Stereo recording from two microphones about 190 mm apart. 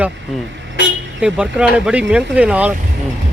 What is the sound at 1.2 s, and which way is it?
Speech, 5° right (ahead or behind).